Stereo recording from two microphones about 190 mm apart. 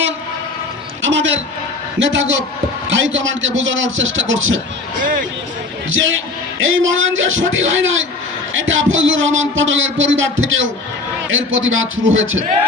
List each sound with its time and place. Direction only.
1.0 s a man's voice: 80° right
5.9 s a man's voice: 90° right